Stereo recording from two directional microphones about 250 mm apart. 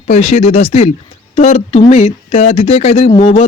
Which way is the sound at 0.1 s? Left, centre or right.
Left.